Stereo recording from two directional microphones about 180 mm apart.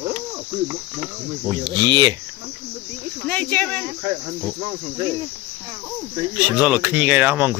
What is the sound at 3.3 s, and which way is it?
Speech, 10° left (ahead or behind).